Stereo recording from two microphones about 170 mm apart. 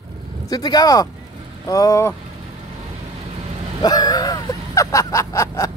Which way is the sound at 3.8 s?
25° left (ahead or behind).